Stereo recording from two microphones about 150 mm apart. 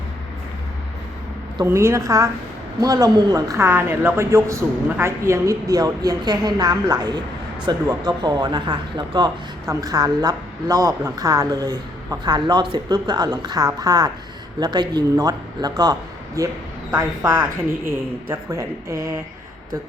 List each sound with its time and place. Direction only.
1.6 s speech: 20° right (ahead or behind)
17.4 s speech: 15° right (ahead or behind)